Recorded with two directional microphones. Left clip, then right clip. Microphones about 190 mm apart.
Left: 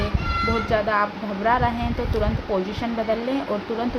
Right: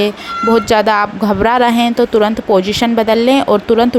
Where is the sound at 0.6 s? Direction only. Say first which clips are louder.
Right 10 dB; 60° right (ahead or behind).